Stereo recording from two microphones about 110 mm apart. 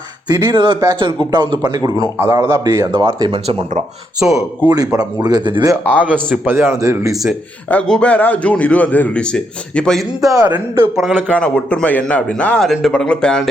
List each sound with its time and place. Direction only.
0.3 s a man's voice: 40° right (ahead or behind); by 2.9 s 25° right (ahead or behind)
2.9 s speech: 40° right (ahead or behind)
3.3 s speech: 55° right (ahead or behind)
4.2 s a man's voice: 10° right (ahead or behind)
4.9 s speech: 40° right (ahead or behind)
6.0 s a man's voice: 15° right (ahead or behind)
7.1 s speech: 5° right (ahead or behind)
7.7 s a man's voice: 10° left (ahead or behind)
10.2 s speech: 35° right (ahead or behind)
10.9 s speech: centre (ahead or behind)
11.2 s a man's voice: 10° left (ahead or behind)